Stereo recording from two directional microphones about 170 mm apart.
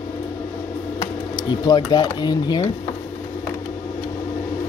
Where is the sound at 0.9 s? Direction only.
25° left (ahead or behind).